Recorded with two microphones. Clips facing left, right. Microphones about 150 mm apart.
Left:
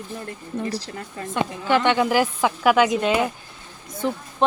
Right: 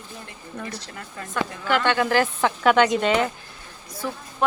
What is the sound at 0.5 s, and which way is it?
A woman's voice, 30° left (ahead or behind).